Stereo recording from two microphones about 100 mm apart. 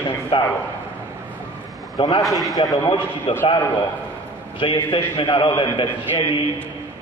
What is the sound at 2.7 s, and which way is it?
Speech, 55° left (ahead or behind).